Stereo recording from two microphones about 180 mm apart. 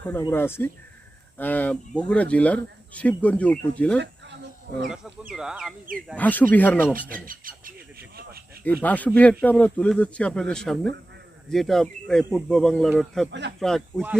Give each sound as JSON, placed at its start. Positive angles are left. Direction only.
{"t": 0.0, "sound": "speech", "side_deg": 10}
{"t": 3.9, "sound": "a sound", "side_deg": -75}
{"t": 5.3, "sound": "speech", "side_deg": -5}
{"t": 6.1, "sound": "speech", "side_deg": 10}
{"t": 7.1, "sound": "a sound", "side_deg": -50}
{"t": 8.8, "sound": "speech", "side_deg": 10}